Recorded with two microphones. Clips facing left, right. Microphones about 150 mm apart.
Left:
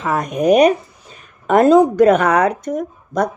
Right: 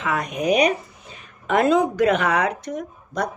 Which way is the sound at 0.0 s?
40° left (ahead or behind).